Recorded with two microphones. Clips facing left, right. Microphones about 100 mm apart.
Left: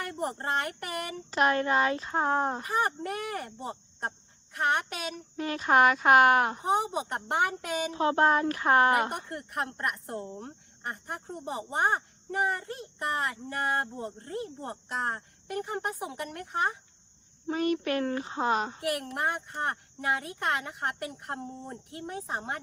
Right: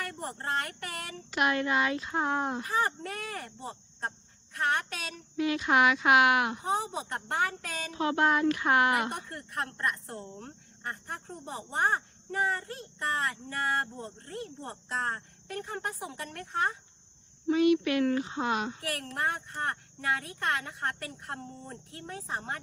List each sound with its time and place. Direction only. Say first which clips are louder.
0.0 s speech: left 4 dB; 20° left (ahead or behind)
1.3 s a child's voice: left 2 dB; 35° left (ahead or behind)
2.6 s speech: left 1 dB; 15° left (ahead or behind)
5.4 s a child's voice: left 2 dB; 40° left (ahead or behind)
6.7 s speech: left 3 dB; 15° left (ahead or behind)
7.9 s a child's voice: left 2 dB; 35° left (ahead or behind)
9.3 s speech: left 2 dB; 20° left (ahead or behind)
17.4 s a child's voice: right 4 dB; 40° left (ahead or behind)
18.8 s speech: left 3 dB; 15° left (ahead or behind)